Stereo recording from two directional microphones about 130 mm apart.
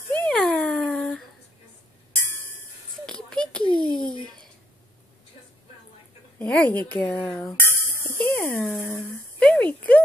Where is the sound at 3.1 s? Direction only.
5° left (ahead or behind).